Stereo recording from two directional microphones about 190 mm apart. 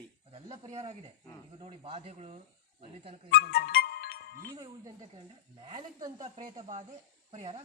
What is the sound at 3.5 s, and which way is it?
Music, 55° left (ahead or behind).